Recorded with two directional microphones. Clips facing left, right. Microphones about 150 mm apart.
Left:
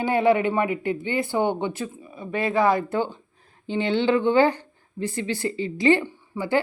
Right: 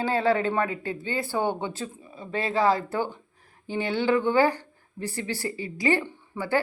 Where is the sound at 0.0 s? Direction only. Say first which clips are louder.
Left 4 dB; 15° left (ahead or behind).